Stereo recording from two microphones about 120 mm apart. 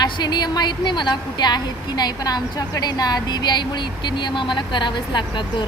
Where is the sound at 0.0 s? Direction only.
35° left (ahead or behind).